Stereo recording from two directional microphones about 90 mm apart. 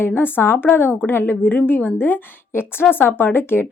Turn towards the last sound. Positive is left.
turn(degrees=25)  # may be behind; listen again after turning